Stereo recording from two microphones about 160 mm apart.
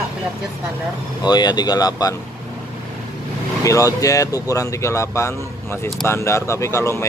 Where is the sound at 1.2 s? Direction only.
25° left (ahead or behind).